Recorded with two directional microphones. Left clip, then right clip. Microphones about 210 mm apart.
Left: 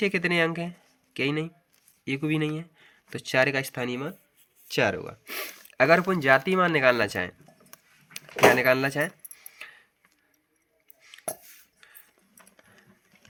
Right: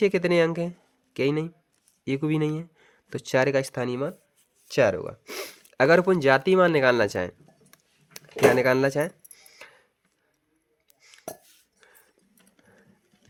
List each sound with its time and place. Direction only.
0.0 s speech: 55° right (ahead or behind)
6.0 s speech: 40° right (ahead or behind)
8.1 s keys jangling: 55° right (ahead or behind)